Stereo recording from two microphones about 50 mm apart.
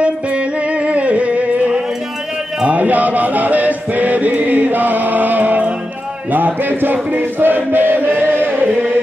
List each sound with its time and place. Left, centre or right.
0.0 s music: right
6.3 s chant: right